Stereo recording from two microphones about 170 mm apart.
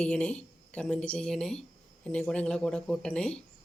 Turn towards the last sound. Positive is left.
turn(degrees=5)  # may be behind; listen again after turning